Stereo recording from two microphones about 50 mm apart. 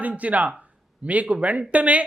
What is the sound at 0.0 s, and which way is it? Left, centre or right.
Speech, right.